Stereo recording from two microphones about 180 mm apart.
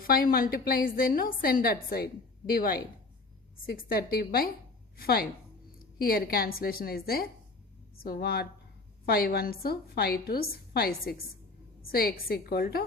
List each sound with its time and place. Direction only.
0.0 s a woman's voice: 55° left (ahead or behind)